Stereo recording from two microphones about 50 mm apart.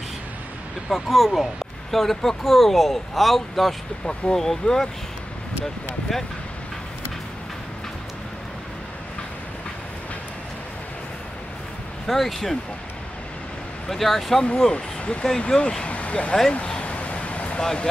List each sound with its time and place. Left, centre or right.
0.8 s speech: centre
4.0 s speech: centre
12.1 s speech: centre
13.8 s speech: centre; by 16.3 s left
16.6 s a sound: left